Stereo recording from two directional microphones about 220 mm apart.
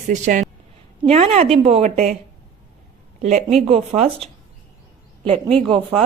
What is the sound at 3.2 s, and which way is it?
Speech, 30° right (ahead or behind).